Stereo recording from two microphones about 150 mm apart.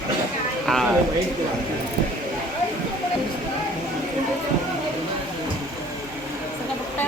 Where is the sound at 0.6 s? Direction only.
Centre (ahead or behind).